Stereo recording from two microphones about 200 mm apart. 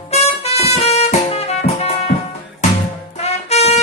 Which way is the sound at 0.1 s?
30° left (ahead or behind).